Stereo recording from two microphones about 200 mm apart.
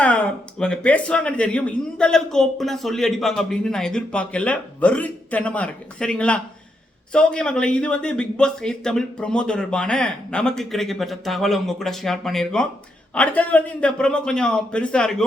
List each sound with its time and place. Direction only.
0.0 s speech: 5° left (ahead or behind)